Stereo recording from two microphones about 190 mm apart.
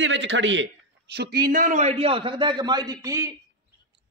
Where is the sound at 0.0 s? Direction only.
75° right (ahead or behind).